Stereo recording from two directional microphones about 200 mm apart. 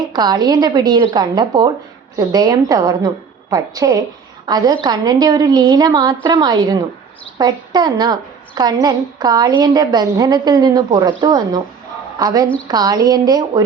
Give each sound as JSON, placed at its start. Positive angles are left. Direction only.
{"t": 0.1, "sound": "a woman's voice", "side_deg": -20}